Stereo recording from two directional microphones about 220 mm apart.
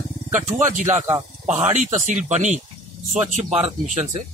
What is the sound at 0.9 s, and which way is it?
Speech, 15° right (ahead or behind).